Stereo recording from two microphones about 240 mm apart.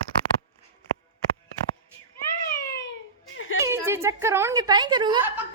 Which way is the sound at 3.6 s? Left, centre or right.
Centre.